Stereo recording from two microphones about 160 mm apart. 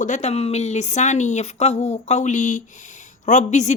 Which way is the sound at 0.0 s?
45° left (ahead or behind).